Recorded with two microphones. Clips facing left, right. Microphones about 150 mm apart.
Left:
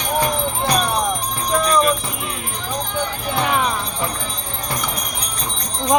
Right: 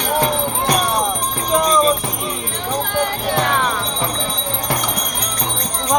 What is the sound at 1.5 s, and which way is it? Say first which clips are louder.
Jingle bell: right 2 dB; 25° right (ahead or behind).